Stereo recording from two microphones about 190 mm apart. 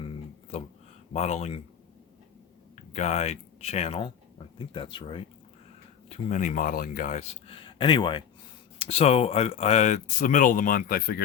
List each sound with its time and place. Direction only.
1.1 s speech: 35° left (ahead or behind)
2.9 s speech: 35° left (ahead or behind); by 11.2 s 50° left (ahead or behind)